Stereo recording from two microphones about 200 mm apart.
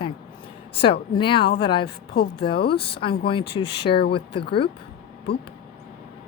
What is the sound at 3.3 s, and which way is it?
Speech, 25° left (ahead or behind).